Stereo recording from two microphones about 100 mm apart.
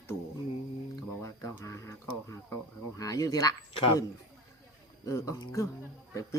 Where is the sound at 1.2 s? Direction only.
30° left (ahead or behind).